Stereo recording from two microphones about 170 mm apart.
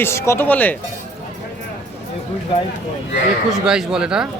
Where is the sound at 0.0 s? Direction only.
15° left (ahead or behind).